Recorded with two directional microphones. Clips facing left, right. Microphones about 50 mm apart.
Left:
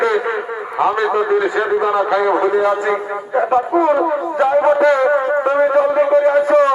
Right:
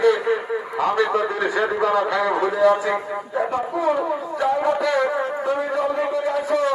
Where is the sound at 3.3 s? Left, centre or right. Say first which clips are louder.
Left 9 dB; left.